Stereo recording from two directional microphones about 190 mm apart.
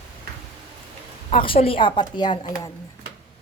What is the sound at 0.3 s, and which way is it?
Tick-tock, 55° right (ahead or behind).